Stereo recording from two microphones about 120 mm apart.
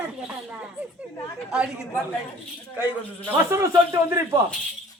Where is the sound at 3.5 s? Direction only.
25° right (ahead or behind).